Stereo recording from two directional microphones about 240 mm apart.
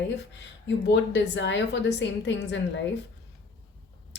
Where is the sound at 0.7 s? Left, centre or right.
Left.